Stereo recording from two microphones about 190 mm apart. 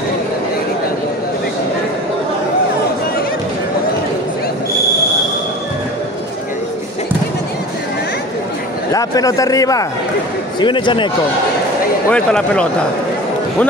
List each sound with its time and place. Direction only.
8.9 s a man's voice: 20° left (ahead or behind)
12.1 s speech: 5° left (ahead or behind)